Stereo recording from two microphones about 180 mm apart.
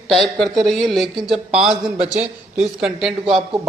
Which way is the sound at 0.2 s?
Centre (ahead or behind).